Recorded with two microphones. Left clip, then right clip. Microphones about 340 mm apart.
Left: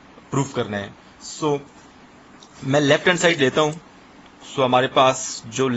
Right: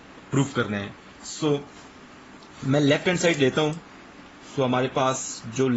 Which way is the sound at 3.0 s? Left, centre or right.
Left.